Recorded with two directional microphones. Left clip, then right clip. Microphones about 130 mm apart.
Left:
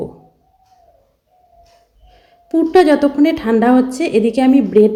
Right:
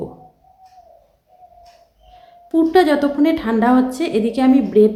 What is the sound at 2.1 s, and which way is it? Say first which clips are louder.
A woman's voice: left 3 dB; 15° left (ahead or behind).